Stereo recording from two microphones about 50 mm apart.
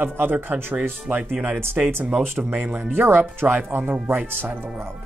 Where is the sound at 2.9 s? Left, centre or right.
Right.